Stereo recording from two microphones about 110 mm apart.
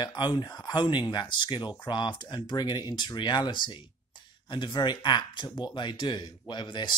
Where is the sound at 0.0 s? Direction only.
40° left (ahead or behind).